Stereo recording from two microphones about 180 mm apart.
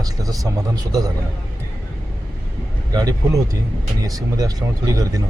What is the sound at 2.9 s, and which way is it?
Speech, 20° right (ahead or behind).